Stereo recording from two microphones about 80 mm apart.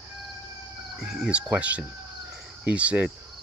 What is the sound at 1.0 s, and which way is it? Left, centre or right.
Speech, centre.